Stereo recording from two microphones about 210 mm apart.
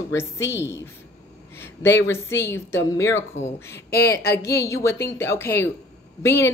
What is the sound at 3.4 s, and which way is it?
Speech, 60° left (ahead or behind).